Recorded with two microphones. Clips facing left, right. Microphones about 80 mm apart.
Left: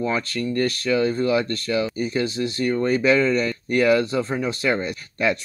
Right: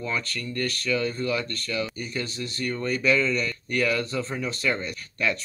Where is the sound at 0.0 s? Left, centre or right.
Left.